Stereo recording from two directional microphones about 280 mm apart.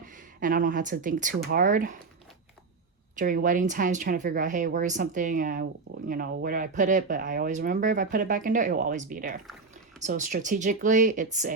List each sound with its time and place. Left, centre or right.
0.0 s speech: right
3.2 s speech: right